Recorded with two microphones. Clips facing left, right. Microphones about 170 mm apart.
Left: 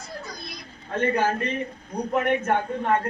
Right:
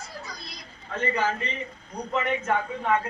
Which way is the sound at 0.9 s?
55° left (ahead or behind).